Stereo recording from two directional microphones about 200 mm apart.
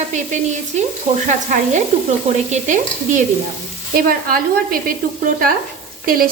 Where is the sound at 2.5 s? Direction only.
40° right (ahead or behind).